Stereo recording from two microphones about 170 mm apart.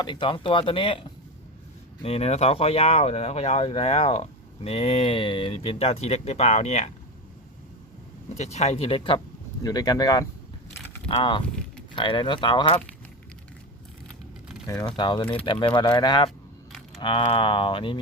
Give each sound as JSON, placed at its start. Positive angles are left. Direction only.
{"t": 0.0, "sound": "speech", "side_deg": 30}
{"t": 8.4, "sound": "speech", "side_deg": 40}
{"t": 14.7, "sound": "speech", "side_deg": 20}